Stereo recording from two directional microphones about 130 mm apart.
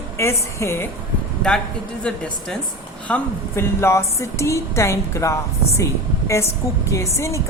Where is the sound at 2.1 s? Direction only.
5° left (ahead or behind).